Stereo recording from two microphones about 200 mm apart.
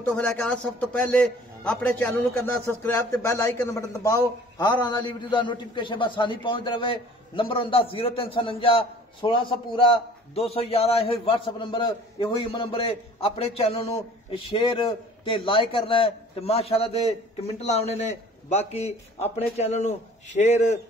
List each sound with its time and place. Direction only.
0.0 s a man's voice: 5° left (ahead or behind); by 20.6 s 35° left (ahead or behind)